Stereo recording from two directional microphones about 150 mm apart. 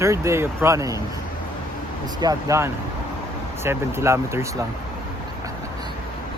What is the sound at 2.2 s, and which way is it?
Speech, 20° right (ahead or behind).